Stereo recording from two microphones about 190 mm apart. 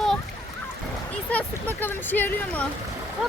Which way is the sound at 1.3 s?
10° left (ahead or behind).